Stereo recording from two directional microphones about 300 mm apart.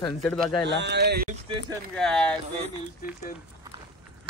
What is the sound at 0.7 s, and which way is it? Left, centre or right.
Speech, right.